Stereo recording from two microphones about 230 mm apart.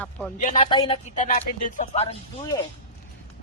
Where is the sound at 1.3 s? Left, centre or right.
Left.